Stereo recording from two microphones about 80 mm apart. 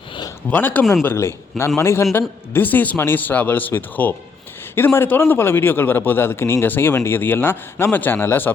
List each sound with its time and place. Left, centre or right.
0.5 s a man's voice: left
1.0 s a man's voice: left